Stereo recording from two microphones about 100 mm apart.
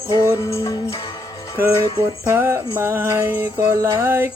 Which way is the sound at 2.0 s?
25° right (ahead or behind).